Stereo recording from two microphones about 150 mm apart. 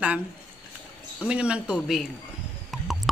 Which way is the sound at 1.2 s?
5° right (ahead or behind).